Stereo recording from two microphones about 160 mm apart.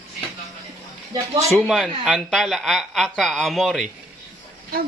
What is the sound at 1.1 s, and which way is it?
Speech, 20° right (ahead or behind).